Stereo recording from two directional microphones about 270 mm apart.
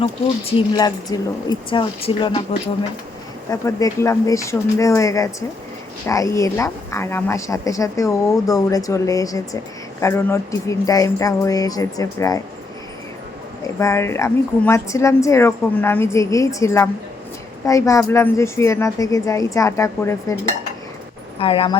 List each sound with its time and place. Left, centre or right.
0.0 s a woman's voice: centre
13.7 s a woman's voice: centre
21.3 s speech: left